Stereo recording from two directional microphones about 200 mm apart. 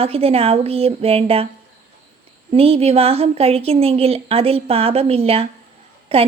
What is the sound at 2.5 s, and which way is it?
A woman's voice, 30° right (ahead or behind).